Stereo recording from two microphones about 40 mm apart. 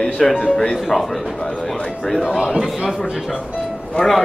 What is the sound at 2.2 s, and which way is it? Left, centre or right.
Speech, centre.